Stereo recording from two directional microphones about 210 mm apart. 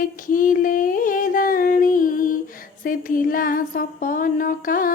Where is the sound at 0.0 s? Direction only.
40° left (ahead or behind).